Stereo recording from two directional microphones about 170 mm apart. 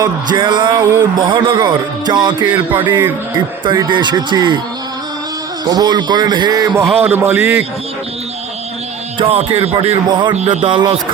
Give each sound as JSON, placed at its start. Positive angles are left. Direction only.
{"t": 0.0, "sound": "speech", "side_deg": -25}
{"t": 5.6, "sound": "a man's voice", "side_deg": -25}
{"t": 9.1, "sound": "music", "side_deg": -35}
{"t": 10.5, "sound": "speech", "side_deg": -25}